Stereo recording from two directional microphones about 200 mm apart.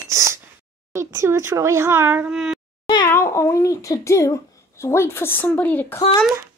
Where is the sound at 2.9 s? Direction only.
15° left (ahead or behind).